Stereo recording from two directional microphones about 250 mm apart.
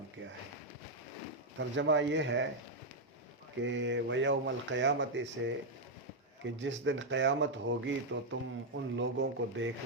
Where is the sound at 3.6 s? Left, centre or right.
Right.